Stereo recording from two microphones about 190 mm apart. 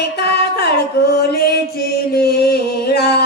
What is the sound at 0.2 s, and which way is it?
Music, 60° left (ahead or behind).